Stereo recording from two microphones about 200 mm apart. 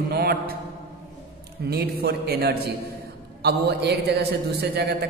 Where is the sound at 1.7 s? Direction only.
50° right (ahead or behind).